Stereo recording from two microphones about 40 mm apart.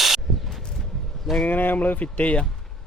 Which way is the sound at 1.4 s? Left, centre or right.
Left.